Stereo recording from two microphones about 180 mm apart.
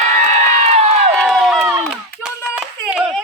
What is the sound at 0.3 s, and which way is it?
Crowd, 40° right (ahead or behind).